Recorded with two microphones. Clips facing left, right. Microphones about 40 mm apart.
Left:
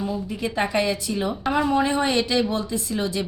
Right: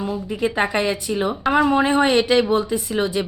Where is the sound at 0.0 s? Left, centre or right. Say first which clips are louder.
Right 4 dB; right.